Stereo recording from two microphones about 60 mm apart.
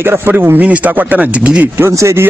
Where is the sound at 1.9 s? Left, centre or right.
Right.